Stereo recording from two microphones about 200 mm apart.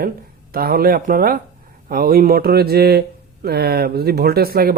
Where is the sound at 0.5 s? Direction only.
50° right (ahead or behind).